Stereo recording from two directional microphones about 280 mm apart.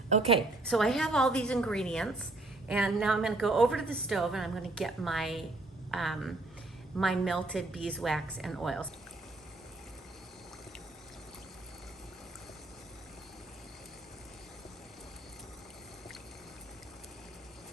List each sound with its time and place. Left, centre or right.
0.1 s a woman's voice: right
0.7 s a woman's voice: centre